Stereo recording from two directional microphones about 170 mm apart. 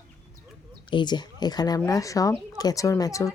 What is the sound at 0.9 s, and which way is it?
Speech, 25° left (ahead or behind).